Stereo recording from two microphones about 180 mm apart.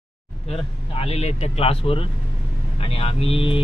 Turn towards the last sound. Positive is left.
turn(degrees=30)  # may be behind; listen again after turning